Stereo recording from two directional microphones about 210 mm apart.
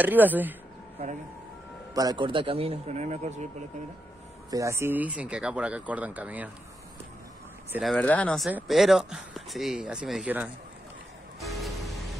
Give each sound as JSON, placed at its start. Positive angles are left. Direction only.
{"t": 0.0, "sound": "speech", "side_deg": -10}
{"t": 2.0, "sound": "a man's voice", "side_deg": -20}
{"t": 4.5, "sound": "speech", "side_deg": -15}
{"t": 7.7, "sound": "speech", "side_deg": 0}
{"t": 11.3, "sound": "music", "side_deg": 0}